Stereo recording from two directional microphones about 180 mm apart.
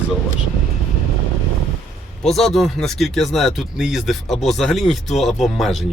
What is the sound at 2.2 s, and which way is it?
Speech, centre (ahead or behind).